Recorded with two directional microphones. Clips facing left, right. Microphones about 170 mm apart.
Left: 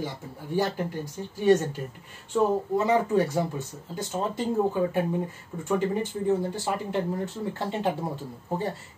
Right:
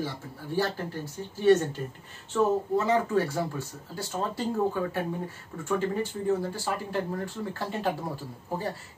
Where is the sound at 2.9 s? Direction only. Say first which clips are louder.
Left 4 dB; 15° left (ahead or behind).